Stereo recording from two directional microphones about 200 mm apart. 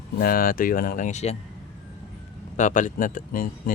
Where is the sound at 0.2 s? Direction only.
45° left (ahead or behind).